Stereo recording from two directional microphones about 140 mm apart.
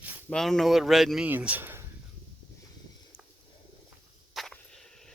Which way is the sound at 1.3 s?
10° right (ahead or behind).